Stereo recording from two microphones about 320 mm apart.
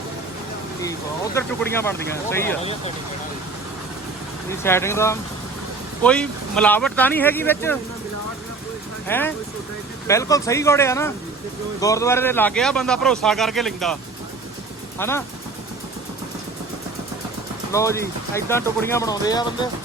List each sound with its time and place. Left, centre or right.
0.8 s speech: centre
2.6 s speech: centre
4.4 s speech: centre
9.0 s speech: centre
17.7 s speech: centre